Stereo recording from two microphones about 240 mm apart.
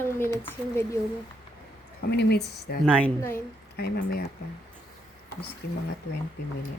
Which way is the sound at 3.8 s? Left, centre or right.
Left.